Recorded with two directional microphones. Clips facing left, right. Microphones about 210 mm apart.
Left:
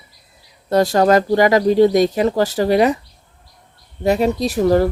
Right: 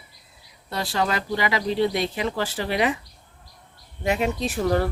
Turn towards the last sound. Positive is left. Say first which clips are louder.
# left 8 dB
turn(degrees=40)  # may be behind; listen again after turning